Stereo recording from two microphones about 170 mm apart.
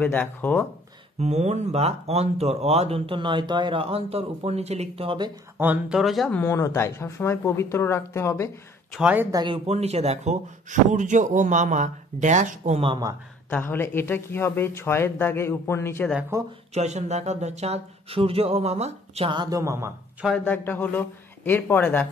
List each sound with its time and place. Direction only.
0.0 s speech: 10° left (ahead or behind)
1.2 s speech: 40° right (ahead or behind)
5.6 s speech: 5° right (ahead or behind); by 8.5 s 15° left (ahead or behind)
9.0 s speech: 10° right (ahead or behind)
9.3 s speech: 25° right (ahead or behind)
9.7 s speech: 40° right (ahead or behind)
13.5 s speech: 10° left (ahead or behind)
16.3 s speech: 20° right (ahead or behind)
16.7 s speech: 40° right (ahead or behind); by 20.2 s 15° right (ahead or behind)
20.2 s speech: 10° left (ahead or behind)